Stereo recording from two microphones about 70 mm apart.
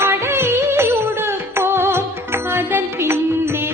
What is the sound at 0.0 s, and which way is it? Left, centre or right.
Music, right.